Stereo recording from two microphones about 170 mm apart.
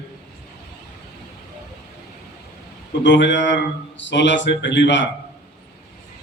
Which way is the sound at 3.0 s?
90° left.